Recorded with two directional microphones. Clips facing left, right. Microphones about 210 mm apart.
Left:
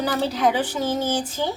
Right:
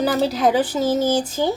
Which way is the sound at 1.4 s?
15° right (ahead or behind).